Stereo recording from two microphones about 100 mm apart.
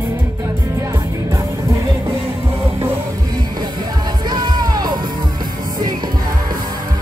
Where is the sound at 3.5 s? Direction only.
45° right (ahead or behind).